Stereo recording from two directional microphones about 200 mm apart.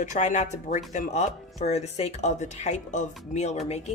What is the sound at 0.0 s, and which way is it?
Speech, 35° left (ahead or behind).